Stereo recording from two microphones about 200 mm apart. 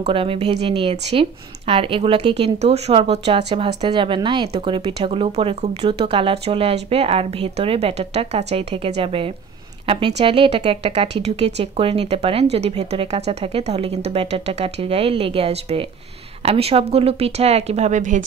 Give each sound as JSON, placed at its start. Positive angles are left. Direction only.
{"t": 0.0, "sound": "a woman's voice", "side_deg": -25}